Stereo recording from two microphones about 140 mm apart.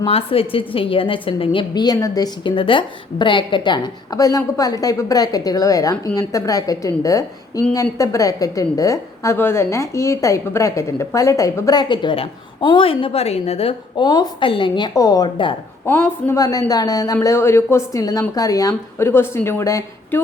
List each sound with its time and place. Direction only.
0.1 s a woman's voice: 45° left (ahead or behind)
15.9 s a woman's voice: 15° left (ahead or behind)